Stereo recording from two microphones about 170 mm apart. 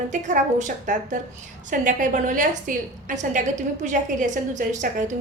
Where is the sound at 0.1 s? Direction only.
45° right (ahead or behind).